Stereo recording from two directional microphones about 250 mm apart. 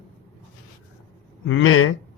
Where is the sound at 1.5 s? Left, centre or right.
Left.